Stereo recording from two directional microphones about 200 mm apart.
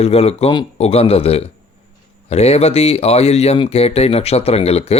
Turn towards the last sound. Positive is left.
turn(degrees=30)  # may be behind; listen again after turning